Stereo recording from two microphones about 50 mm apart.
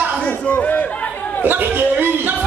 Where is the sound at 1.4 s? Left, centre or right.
Right.